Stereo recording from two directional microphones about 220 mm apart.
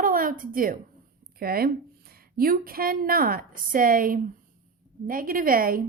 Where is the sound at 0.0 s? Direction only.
40° right (ahead or behind).